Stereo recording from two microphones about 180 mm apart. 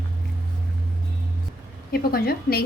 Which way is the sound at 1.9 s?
60° left (ahead or behind).